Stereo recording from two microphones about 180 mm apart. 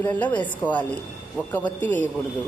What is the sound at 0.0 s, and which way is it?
Speech, 10° left (ahead or behind).